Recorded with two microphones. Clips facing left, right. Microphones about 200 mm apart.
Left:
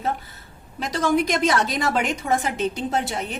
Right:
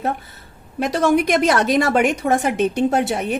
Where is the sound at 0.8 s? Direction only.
60° right (ahead or behind).